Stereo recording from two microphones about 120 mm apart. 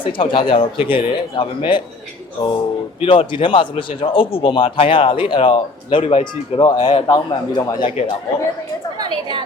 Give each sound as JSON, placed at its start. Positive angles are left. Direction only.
{"t": 0.0, "sound": "a man's voice", "side_deg": 45}
{"t": 6.6, "sound": "speech", "side_deg": 35}
{"t": 9.0, "sound": "a woman's voice", "side_deg": -40}